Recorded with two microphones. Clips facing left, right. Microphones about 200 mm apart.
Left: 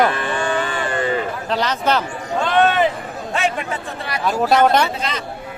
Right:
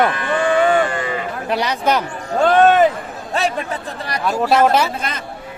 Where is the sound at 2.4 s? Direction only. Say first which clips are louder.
Right 5 dB; 45° right (ahead or behind).